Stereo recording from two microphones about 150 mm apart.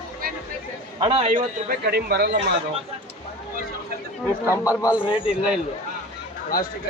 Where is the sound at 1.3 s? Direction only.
75° right (ahead or behind); by 2.4 s 90° right.